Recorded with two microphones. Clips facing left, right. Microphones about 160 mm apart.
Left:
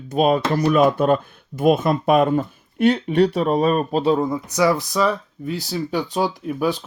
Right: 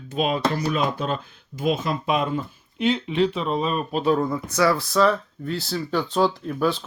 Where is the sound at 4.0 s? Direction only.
20° left (ahead or behind).